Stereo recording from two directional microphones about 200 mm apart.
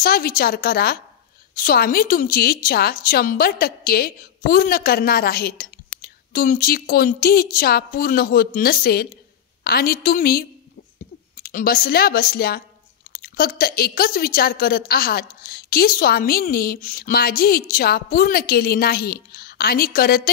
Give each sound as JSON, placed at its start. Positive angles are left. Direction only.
{"t": 0.0, "sound": "a woman's voice", "side_deg": 45}